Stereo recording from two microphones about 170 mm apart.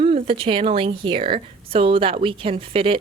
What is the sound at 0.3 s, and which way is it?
A woman's voice, 30° right (ahead or behind).